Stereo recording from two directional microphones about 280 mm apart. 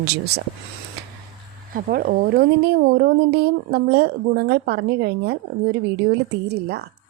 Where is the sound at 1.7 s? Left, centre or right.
Right.